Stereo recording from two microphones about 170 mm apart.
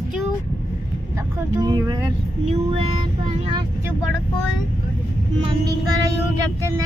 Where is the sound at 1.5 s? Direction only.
20° right (ahead or behind).